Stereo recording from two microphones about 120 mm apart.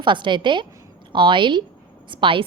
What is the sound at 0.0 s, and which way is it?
A woman's voice, 40° right (ahead or behind).